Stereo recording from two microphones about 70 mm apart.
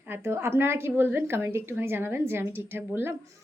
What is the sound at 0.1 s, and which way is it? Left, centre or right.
A woman's voice, right.